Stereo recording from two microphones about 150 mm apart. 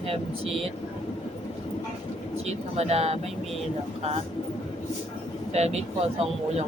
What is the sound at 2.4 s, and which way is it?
Speech, 45° right (ahead or behind).